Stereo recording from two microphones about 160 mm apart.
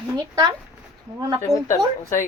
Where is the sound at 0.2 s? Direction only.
20° right (ahead or behind).